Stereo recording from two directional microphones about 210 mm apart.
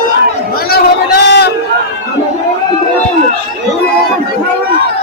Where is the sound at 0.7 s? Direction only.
50° left (ahead or behind).